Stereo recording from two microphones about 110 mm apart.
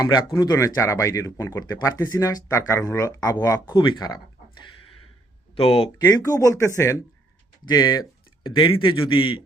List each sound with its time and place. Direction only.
0.0 s speech: 40° left (ahead or behind)
5.5 s speech: 55° left (ahead or behind)
6.1 s speech: 30° left (ahead or behind)
7.6 s speech: 40° left (ahead or behind)
8.4 s a man's voice: 50° left (ahead or behind)